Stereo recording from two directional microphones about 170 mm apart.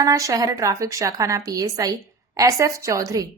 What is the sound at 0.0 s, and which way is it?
A woman's voice, 20° right (ahead or behind).